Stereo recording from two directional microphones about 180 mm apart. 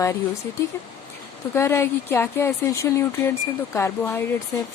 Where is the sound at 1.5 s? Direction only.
15° left (ahead or behind).